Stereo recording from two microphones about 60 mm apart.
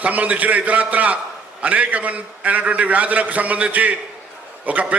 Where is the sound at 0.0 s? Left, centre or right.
Right.